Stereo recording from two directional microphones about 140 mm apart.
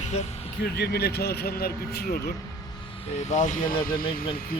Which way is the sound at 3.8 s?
90° left.